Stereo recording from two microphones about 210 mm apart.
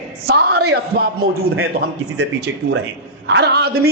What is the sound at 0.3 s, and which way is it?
A man's voice, 50° right (ahead or behind).